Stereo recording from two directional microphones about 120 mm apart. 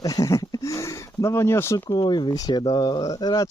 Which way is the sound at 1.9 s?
40° left (ahead or behind).